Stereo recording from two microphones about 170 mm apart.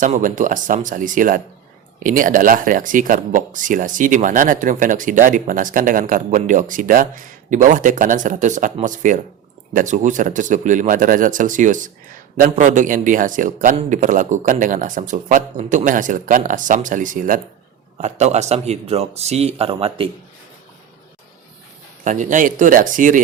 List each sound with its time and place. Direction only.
0.0 s speech: 50° right (ahead or behind)
22.0 s speech: 50° right (ahead or behind)